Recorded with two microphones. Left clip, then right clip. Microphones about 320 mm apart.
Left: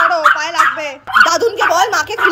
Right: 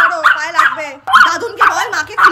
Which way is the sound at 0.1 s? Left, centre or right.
Centre.